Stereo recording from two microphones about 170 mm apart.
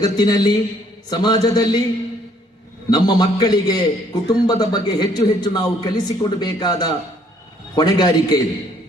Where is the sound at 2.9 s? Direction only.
25° left (ahead or behind).